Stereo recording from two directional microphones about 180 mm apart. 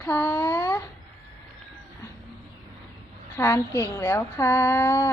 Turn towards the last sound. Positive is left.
turn(degrees=15)  # may be behind; listen again after turning